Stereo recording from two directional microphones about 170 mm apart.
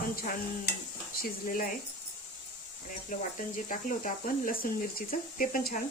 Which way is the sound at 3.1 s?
50° left (ahead or behind).